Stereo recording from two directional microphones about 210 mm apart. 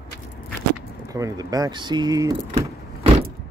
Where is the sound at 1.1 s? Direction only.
15° right (ahead or behind).